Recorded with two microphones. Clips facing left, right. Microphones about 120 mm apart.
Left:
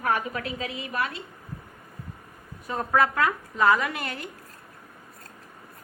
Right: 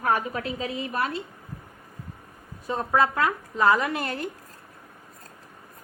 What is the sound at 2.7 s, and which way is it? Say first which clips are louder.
Speech: right 1 dB; 25° right (ahead or behind).